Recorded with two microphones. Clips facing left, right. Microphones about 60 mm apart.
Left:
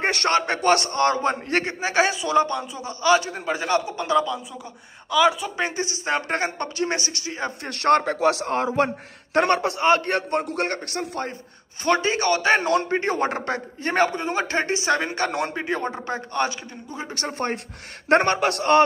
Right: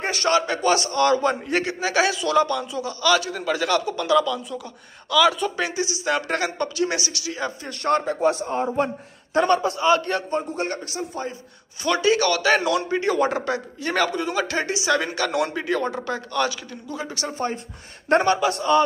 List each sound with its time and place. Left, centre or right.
0.0 s a man's voice: left
5.6 s a man's voice: left
7.6 s a man's voice: left
10.4 s a man's voice: left
11.8 s a man's voice: left
17.1 s a man's voice: left